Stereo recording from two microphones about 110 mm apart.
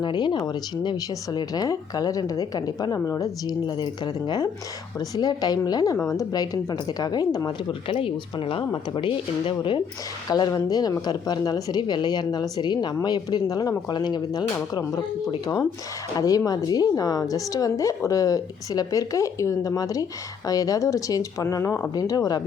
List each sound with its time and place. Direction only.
0.0 s speech: 45° left (ahead or behind)
7.7 s speech: 55° left (ahead or behind)
10.2 s speech: 35° left (ahead or behind)
16.1 s speech: 35° left (ahead or behind)